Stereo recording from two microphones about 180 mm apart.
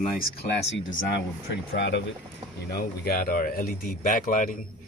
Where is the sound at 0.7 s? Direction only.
85° left.